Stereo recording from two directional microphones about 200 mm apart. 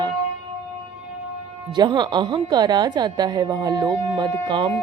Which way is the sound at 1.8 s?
20° right (ahead or behind).